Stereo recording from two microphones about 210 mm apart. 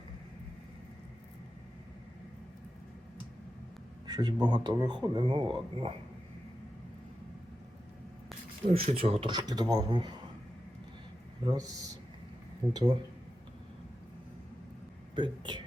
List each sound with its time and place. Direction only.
4.0 s speech: 20° right (ahead or behind)
8.7 s speech: 25° right (ahead or behind)
11.4 s speech: 20° right (ahead or behind)
12.7 s speech: 20° right (ahead or behind)
15.1 s speech: 20° right (ahead or behind)